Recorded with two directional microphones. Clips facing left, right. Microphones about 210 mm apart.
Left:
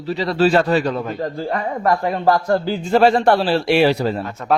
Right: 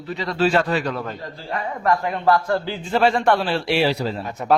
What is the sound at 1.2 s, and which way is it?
A man's voice, 45° left (ahead or behind).